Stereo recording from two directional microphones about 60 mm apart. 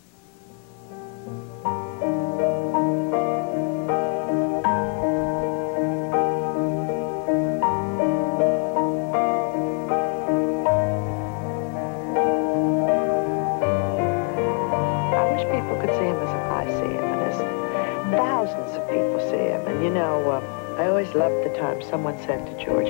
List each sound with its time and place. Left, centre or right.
1.7 s music: left
12.1 s music: left
16.6 s music: centre
16.9 s music: left
21.3 s speech: left